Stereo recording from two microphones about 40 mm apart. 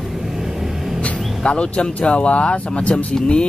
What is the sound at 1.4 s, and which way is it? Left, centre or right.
Speech, left.